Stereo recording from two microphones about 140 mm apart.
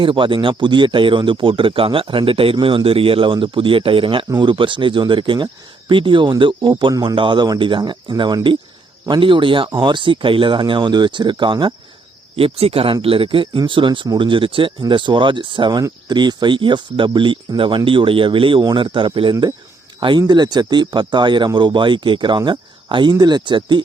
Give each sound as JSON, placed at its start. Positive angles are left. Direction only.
{"t": 0.0, "sound": "speech", "side_deg": -35}
{"t": 12.4, "sound": "speech", "side_deg": -45}